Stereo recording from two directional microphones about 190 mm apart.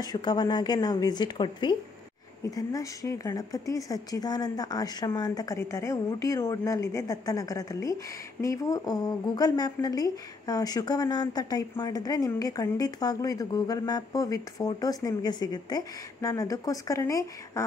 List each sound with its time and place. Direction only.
0.0 s a woman's voice: 20° left (ahead or behind)